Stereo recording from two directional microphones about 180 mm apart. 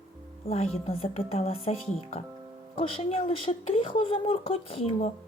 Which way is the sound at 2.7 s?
30° left (ahead or behind).